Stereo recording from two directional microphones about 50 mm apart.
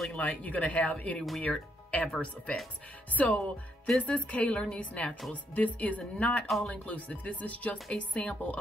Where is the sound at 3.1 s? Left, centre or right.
Left.